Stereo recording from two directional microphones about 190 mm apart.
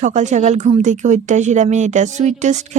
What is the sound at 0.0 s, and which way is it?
A woman's voice, 40° right (ahead or behind).